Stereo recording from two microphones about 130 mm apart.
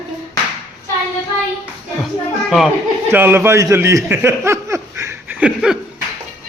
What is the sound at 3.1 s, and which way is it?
Speech, 15° right (ahead or behind).